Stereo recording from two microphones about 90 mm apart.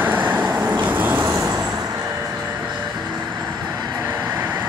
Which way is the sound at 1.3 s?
35° right (ahead or behind).